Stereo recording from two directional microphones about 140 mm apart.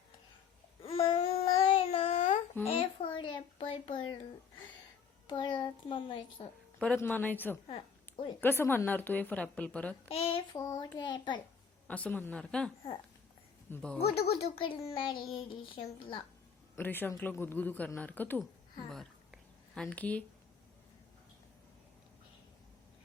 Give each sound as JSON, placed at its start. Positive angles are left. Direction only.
{"t": 0.8, "sound": "babbling", "side_deg": 40}
{"t": 2.6, "sound": "a sound", "side_deg": 40}
{"t": 5.3, "sound": "a sound", "side_deg": 30}
{"t": 6.4, "sound": "child singing", "side_deg": 35}
{"t": 6.7, "sound": "speech", "side_deg": 0}
{"t": 7.0, "sound": "a woman's voice", "side_deg": 15}
{"t": 10.1, "sound": "child singing", "side_deg": 45}
{"t": 10.5, "sound": "child singing", "side_deg": 25}
{"t": 11.9, "sound": "a woman's voice", "side_deg": 10}
{"t": 14.0, "sound": "a child's voice", "side_deg": 45}
{"t": 14.9, "sound": "child singing", "side_deg": 35}
{"t": 16.7, "sound": "a woman's voice", "side_deg": 15}
{"t": 18.9, "sound": "a sound", "side_deg": 5}